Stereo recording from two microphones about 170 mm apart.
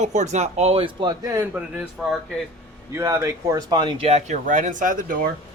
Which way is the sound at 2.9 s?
15° right (ahead or behind).